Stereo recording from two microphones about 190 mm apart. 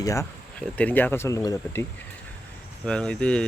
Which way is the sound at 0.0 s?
15° left (ahead or behind).